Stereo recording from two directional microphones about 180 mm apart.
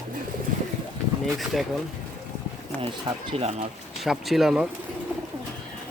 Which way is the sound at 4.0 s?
Centre (ahead or behind).